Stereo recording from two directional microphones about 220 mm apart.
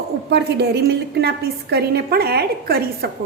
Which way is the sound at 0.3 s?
50° right (ahead or behind).